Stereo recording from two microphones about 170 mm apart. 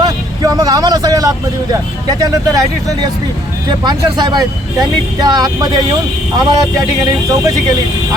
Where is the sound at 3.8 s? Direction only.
25° right (ahead or behind).